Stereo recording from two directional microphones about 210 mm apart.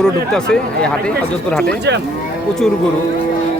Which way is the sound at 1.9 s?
55° right (ahead or behind).